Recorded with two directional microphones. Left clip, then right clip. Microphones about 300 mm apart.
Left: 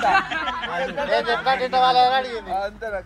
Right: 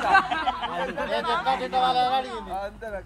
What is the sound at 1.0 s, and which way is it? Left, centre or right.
Speech, centre.